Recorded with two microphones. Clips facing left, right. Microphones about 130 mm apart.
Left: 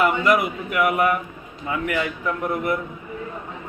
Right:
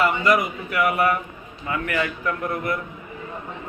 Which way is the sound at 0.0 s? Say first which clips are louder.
Left 1 dB; 5° left (ahead or behind).